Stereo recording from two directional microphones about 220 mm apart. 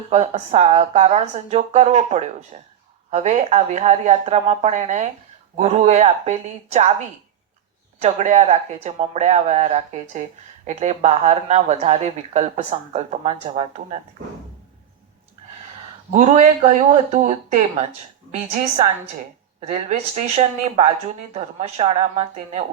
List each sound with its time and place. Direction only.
0.1 s a woman's voice: 30° right (ahead or behind)
7.9 s a woman's voice: 30° right (ahead or behind)
16.1 s a woman's voice: 30° right (ahead or behind)
19.6 s a woman's voice: 30° right (ahead or behind)